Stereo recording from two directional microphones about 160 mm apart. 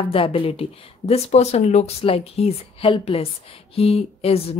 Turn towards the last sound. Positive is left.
turn(degrees=40)  # may be behind; listen again after turning